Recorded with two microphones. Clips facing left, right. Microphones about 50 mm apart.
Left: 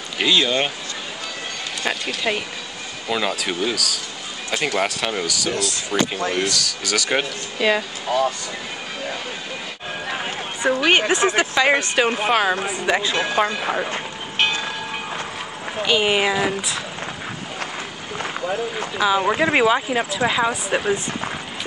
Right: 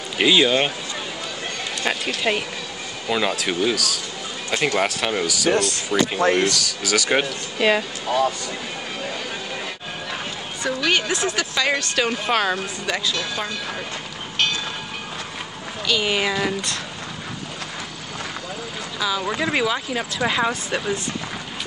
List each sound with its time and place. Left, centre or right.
0.2 s speech: centre
1.8 s speech: centre
5.5 s speech: right
6.2 s speech: right
6.5 s speech: centre
10.0 s a sound: left
10.8 s speech: left
12.3 s speech: centre
12.8 s speech: left
15.8 s speech: left
18.2 s clip-clop: left
18.9 s speech: left
20.2 s speech: centre
20.7 s speech: left